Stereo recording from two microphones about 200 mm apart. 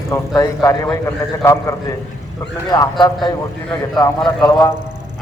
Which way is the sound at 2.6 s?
20° left (ahead or behind).